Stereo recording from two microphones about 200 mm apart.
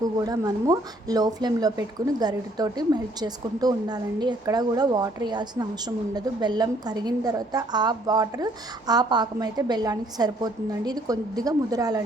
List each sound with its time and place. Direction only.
0.2 s speech: 20° right (ahead or behind)